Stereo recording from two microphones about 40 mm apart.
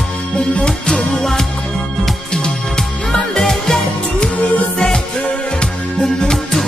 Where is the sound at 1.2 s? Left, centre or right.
Centre.